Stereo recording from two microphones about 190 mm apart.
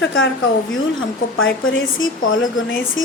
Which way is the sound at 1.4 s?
90° left.